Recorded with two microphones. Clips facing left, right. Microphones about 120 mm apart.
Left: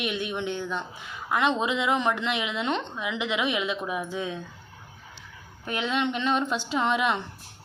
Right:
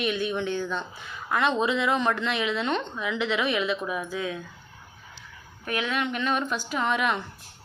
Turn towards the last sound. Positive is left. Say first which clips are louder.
# left 1 dB
turn(degrees=20)  # may be behind; listen again after turning